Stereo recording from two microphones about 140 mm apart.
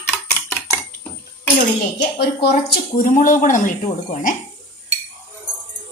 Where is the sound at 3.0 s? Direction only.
70° left (ahead or behind).